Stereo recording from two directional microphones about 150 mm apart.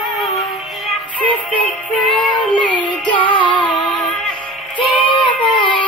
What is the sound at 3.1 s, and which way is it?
Music, 35° left (ahead or behind).